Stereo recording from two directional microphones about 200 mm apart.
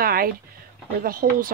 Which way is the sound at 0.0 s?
45° right (ahead or behind).